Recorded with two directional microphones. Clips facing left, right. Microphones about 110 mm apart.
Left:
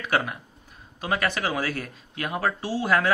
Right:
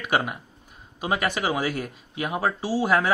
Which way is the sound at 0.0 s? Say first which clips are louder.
Right 1 dB; 15° right (ahead or behind).